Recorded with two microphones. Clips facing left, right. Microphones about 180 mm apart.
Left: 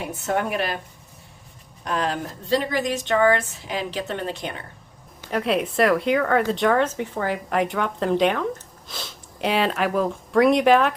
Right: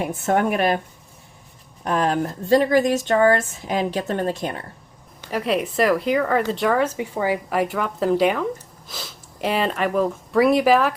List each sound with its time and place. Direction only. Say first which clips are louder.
0.1 s speech: right 2 dB; 50° right (ahead or behind)
1.8 s speech: right 5 dB; 50° right (ahead or behind)
5.3 s speech: even; centre (ahead or behind)